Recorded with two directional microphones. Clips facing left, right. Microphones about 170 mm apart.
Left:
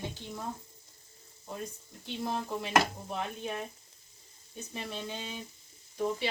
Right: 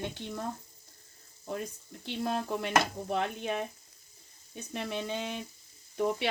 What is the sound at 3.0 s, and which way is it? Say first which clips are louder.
Sizzle: right 5 dB; 65° right (ahead or behind).